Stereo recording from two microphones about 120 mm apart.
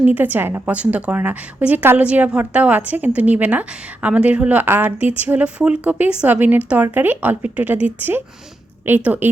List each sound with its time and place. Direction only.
0.0 s a woman's voice: 15° right (ahead or behind)